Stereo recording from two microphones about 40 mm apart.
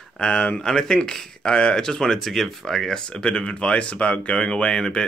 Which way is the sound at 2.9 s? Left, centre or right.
Left.